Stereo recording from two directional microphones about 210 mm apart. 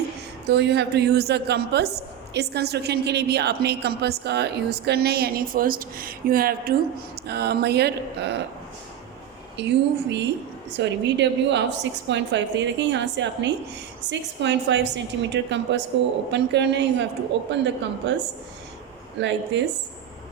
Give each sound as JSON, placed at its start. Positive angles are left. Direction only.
{"t": 0.4, "sound": "a woman's voice", "side_deg": -55}
{"t": 9.6, "sound": "a woman's voice", "side_deg": -55}